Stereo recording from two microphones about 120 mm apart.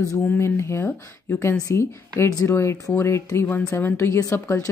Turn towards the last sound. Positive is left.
turn(degrees=25)  # may be behind; listen again after turning